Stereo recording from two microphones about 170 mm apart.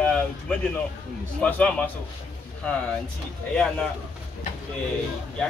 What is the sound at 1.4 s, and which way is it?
Speech, 5° left (ahead or behind).